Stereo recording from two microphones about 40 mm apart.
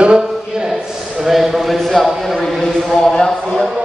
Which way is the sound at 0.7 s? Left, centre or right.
Centre.